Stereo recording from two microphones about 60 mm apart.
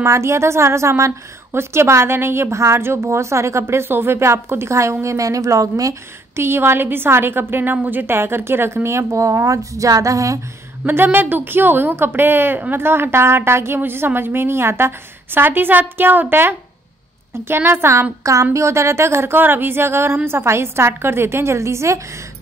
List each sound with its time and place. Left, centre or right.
0.0 s a woman's voice: right
1.5 s a woman's voice: right
5.0 s speech: right
6.3 s a woman's voice: right
10.9 s a woman's voice: right
18.2 s a woman's voice: right